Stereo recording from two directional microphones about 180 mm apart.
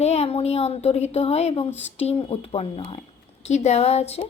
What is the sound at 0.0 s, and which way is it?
Speech, 35° left (ahead or behind).